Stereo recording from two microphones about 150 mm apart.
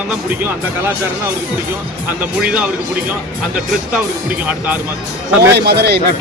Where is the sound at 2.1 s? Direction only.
10° right (ahead or behind).